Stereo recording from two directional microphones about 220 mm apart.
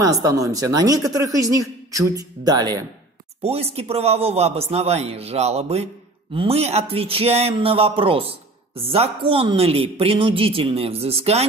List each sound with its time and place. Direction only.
0.0 s a man's voice: 15° right (ahead or behind)